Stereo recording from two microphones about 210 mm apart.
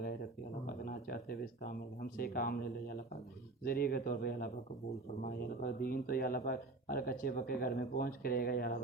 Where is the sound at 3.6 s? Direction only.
45° left (ahead or behind).